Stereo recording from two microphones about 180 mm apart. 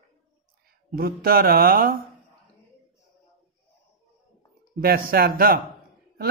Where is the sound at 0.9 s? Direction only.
55° right (ahead or behind).